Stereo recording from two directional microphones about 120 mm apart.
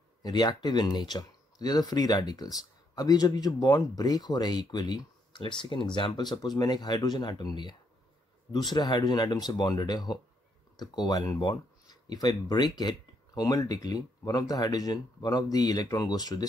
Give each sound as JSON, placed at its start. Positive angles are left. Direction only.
{"t": 0.2, "sound": "speech", "side_deg": 35}